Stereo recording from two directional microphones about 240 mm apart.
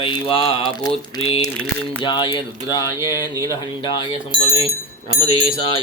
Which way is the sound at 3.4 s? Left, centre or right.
Centre.